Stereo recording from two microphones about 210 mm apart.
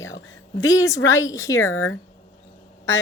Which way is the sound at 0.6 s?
15° left (ahead or behind).